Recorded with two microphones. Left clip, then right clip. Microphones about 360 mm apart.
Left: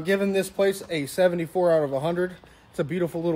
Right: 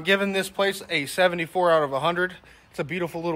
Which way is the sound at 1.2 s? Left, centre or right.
Centre.